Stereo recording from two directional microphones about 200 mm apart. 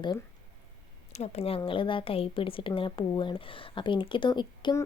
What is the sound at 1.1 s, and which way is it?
A woman's voice, 30° left (ahead or behind).